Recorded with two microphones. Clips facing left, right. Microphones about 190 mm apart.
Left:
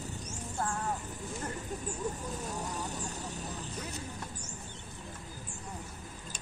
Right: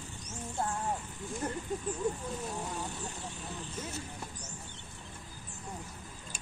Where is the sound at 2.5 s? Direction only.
40° left (ahead or behind).